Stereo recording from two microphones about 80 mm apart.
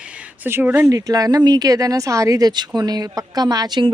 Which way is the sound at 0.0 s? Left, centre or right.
Centre.